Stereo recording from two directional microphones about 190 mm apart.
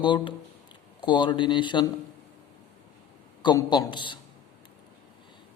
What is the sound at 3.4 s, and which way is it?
Speech, 25° left (ahead or behind).